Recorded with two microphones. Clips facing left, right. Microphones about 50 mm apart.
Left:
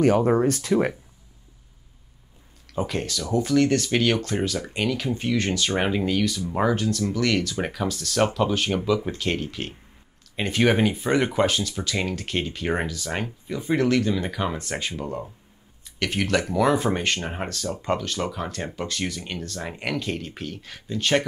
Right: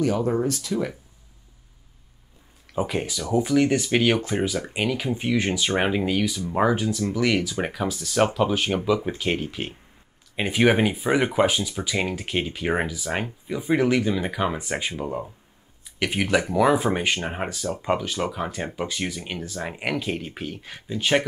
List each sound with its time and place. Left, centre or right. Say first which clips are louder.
0.0 s speech: left 4 dB; left
2.7 s speech: right 1 dB; centre